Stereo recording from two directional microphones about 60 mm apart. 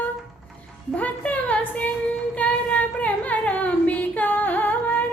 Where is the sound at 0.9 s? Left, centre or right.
Left.